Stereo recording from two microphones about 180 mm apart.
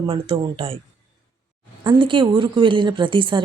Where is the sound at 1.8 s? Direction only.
25° right (ahead or behind).